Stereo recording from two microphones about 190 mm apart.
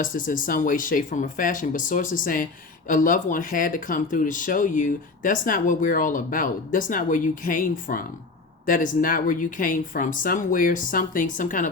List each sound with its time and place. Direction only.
0.0 s speech: 45° left (ahead or behind)